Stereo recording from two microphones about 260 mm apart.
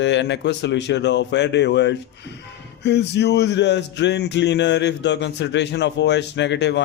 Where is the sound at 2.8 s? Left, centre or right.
Left.